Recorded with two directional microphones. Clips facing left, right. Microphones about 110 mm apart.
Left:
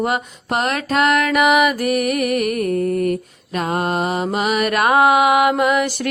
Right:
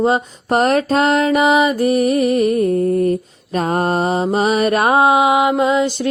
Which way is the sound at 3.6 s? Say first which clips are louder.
Right 3 dB; 35° right (ahead or behind).